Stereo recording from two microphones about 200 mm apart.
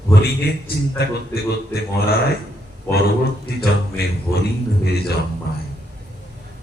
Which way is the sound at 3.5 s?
50° left (ahead or behind).